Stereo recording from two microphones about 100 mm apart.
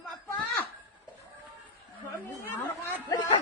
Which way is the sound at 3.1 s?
45° left (ahead or behind).